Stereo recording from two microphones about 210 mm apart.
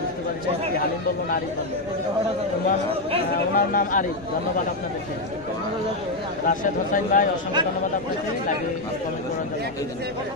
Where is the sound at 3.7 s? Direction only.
40° left (ahead or behind).